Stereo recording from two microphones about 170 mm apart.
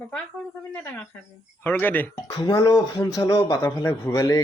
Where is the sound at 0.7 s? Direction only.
10° left (ahead or behind).